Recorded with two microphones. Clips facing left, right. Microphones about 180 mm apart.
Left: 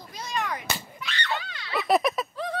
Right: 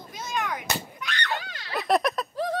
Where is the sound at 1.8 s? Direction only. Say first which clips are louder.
Left 1 dB; centre (ahead or behind).